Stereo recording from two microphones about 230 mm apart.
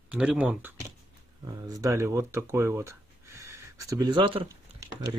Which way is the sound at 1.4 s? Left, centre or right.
Centre.